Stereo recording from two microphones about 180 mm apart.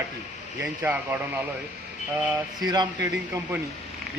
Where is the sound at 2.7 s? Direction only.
25° right (ahead or behind).